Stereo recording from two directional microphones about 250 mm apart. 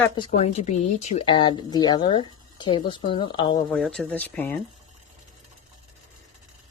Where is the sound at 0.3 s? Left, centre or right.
Left.